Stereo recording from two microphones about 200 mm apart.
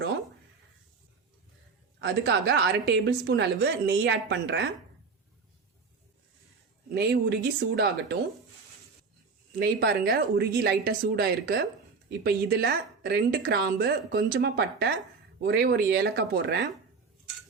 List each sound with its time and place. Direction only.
2.0 s a woman's voice: 55° right (ahead or behind)
6.9 s a woman's voice: 55° right (ahead or behind)
9.6 s a woman's voice: 50° right (ahead or behind)